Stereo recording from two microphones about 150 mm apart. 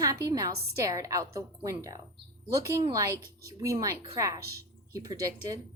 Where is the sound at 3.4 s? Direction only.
20° right (ahead or behind).